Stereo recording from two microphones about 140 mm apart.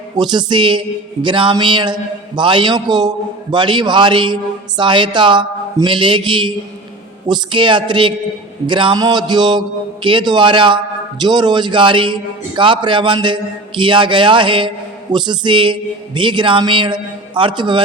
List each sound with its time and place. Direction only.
0.2 s a woman's voice: 30° right (ahead or behind)